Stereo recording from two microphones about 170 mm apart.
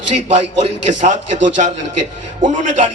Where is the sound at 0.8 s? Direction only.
45° right (ahead or behind).